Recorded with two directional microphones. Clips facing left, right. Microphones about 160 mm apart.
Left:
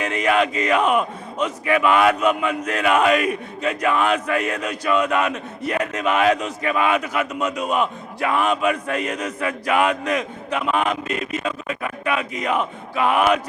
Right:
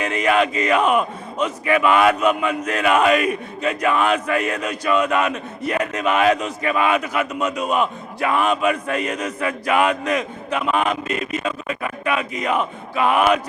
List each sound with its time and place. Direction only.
0.0 s speech: 10° right (ahead or behind)